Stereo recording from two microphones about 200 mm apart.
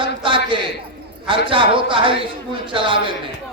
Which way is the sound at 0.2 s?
25° right (ahead or behind).